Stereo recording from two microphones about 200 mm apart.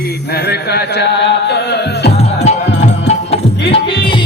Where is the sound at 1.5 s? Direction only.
55° left (ahead or behind).